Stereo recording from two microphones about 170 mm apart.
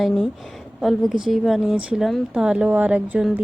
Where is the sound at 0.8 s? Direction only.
Centre (ahead or behind).